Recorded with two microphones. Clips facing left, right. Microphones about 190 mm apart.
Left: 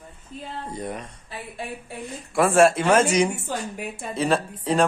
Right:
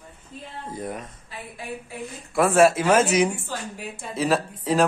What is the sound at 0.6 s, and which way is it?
Speech, centre (ahead or behind).